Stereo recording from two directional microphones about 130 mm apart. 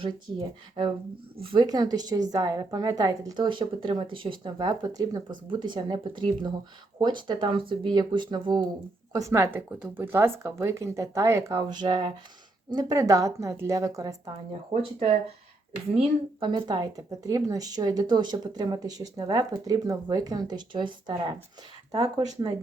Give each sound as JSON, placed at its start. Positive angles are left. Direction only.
{"t": 0.0, "sound": "a woman's voice", "side_deg": -40}
{"t": 9.1, "sound": "speech", "side_deg": -20}
{"t": 14.7, "sound": "speech", "side_deg": -60}
{"t": 16.0, "sound": "a woman's voice", "side_deg": -40}